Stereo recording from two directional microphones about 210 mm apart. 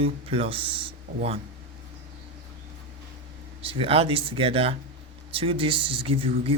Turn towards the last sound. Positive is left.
turn(degrees=-25)  # may be behind; listen again after turning